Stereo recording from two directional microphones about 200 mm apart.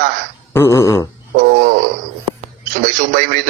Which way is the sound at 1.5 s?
45° right (ahead or behind).